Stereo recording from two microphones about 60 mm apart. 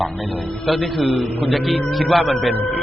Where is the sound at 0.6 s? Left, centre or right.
Centre.